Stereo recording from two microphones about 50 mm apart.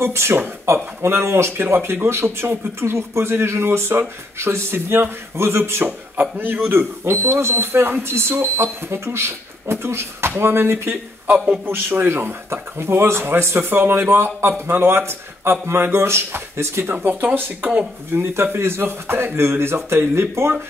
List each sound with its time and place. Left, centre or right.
0.0 s speech: right
1.6 s speech: right
6.3 s speech: right
6.7 s speech: right
11.3 s a man's voice: centre
11.6 s speech: right
16.9 s speech: right
18.3 s speech: right